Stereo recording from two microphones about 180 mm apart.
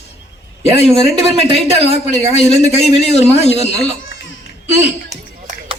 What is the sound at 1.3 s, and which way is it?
Speech, 35° right (ahead or behind).